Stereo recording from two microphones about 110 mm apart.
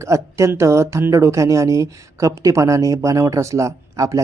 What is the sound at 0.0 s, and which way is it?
Speech, 25° right (ahead or behind).